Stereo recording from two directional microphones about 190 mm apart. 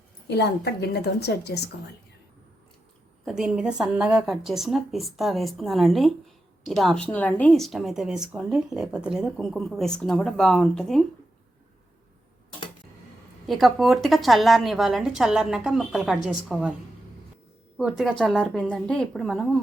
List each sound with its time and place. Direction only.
0.3 s a woman's voice: 60° left (ahead or behind)
3.2 s a woman's voice: 5° right (ahead or behind)
13.5 s a woman's voice: centre (ahead or behind)
17.7 s a woman's voice: centre (ahead or behind)